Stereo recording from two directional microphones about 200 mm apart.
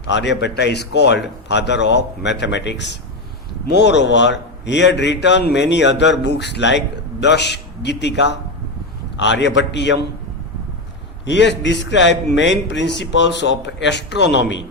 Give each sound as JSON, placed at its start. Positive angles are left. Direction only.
{"t": 0.0, "sound": "a man's voice", "side_deg": 60}
{"t": 11.3, "sound": "a man's voice", "side_deg": 65}